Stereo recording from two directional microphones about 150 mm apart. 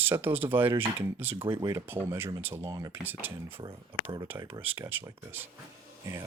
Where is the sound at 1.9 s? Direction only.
15° right (ahead or behind).